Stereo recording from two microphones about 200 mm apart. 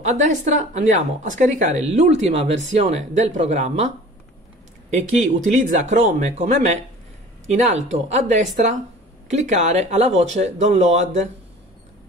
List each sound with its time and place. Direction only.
0.1 s speech: 35° right (ahead or behind)
5.2 s speech: 40° right (ahead or behind)